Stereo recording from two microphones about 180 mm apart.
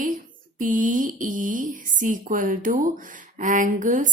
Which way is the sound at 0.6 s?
45° right (ahead or behind).